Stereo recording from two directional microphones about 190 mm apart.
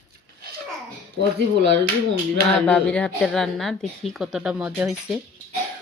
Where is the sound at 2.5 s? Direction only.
5° left (ahead or behind).